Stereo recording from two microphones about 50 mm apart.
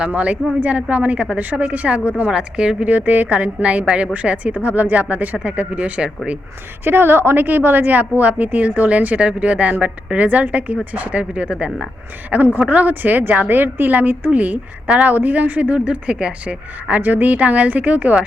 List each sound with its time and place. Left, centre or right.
0.0 s a woman's voice: right
2.8 s a woman's voice: right
6.8 s a woman's voice: right
7.4 s a woman's voice: right
12.5 s a woman's voice: right
15.8 s a woman's voice: centre
16.9 s a woman's voice: right